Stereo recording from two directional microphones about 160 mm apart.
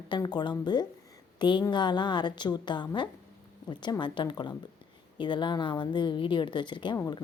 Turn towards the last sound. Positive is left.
turn(degrees=20)  # may be behind; listen again after turning